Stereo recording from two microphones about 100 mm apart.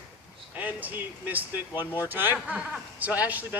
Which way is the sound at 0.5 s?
15° right (ahead or behind).